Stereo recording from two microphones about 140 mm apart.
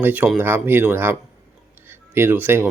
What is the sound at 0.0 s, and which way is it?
Speech, 10° right (ahead or behind).